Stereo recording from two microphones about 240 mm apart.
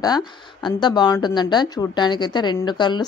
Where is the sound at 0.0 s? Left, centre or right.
Centre.